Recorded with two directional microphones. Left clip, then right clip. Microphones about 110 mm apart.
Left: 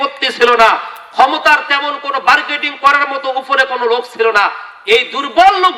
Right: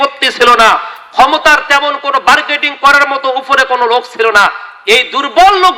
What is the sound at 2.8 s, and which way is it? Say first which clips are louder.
Speech: right 4 dB; 35° right (ahead or behind).